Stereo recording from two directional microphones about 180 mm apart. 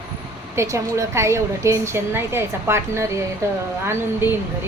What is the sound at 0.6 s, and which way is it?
A woman's voice, 15° right (ahead or behind).